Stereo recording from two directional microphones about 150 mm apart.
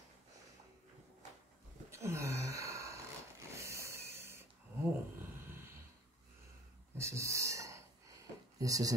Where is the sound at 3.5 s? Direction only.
20° right (ahead or behind).